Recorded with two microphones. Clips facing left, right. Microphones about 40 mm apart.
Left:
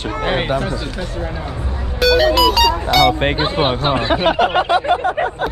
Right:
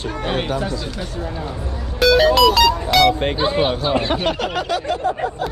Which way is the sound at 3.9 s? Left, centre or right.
Centre.